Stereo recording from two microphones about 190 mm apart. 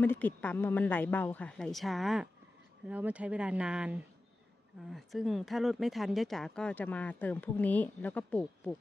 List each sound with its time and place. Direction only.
0.0 s speech: 10° left (ahead or behind)